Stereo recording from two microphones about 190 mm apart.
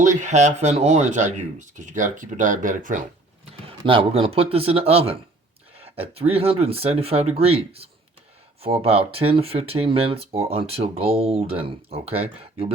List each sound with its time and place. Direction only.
0.2 s speech: 40° right (ahead or behind)
3.7 s speech: 30° right (ahead or behind)